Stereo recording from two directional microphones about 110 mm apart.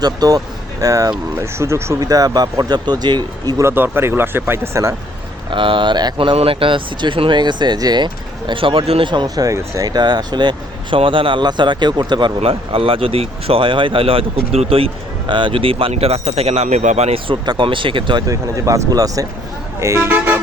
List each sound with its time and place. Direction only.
0.0 s speech: 35° right (ahead or behind)
3.6 s speech: 20° right (ahead or behind)
5.5 s speech: 50° right (ahead or behind)
6.3 s speech: 60° right (ahead or behind); by 12.3 s 40° right (ahead or behind)
12.4 s speech: 60° right (ahead or behind)
15.3 s speech: 50° right (ahead or behind); by 17.2 s 85° right
17.2 s speech: 45° right (ahead or behind)
18.3 s speech: 30° right (ahead or behind)
19.8 s speech: 25° right (ahead or behind)